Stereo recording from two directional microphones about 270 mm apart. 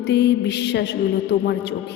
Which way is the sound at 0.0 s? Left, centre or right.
Left.